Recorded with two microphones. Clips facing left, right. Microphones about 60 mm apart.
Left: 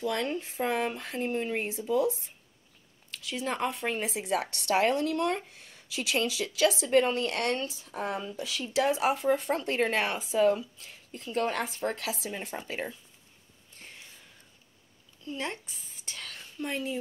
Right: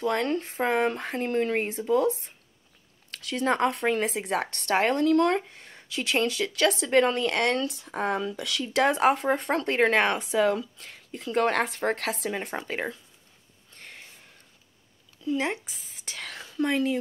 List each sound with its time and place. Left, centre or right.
0.0 s speech: right
5.5 s speech: right
7.1 s speech: right
13.7 s a sound: right
15.3 s speech: right